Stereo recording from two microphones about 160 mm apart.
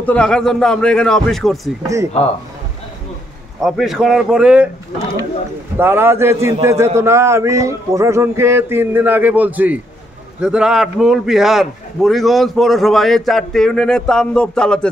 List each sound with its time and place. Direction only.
0.0 s a man's voice: 5° left (ahead or behind)
3.6 s a man's voice: centre (ahead or behind)
5.8 s a man's voice: 15° right (ahead or behind); by 14.9 s 5° left (ahead or behind)